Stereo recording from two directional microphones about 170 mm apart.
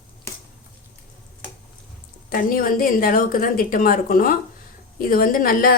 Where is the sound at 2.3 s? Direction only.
55° left (ahead or behind).